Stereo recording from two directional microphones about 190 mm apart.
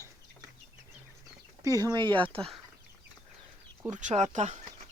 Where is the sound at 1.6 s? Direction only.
20° right (ahead or behind).